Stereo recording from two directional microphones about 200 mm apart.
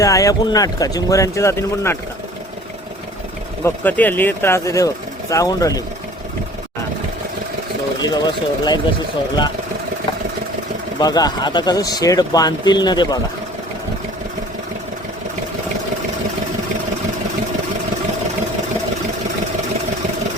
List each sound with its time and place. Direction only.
0.0 s speech: 15° left (ahead or behind)
3.6 s speech: 10° left (ahead or behind)
7.9 s speech: 20° left (ahead or behind)
11.0 s speech: 20° left (ahead or behind)